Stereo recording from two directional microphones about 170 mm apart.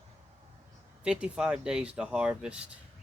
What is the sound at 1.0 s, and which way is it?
Speech, 5° right (ahead or behind).